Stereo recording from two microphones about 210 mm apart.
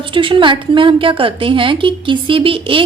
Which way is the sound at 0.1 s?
25° right (ahead or behind).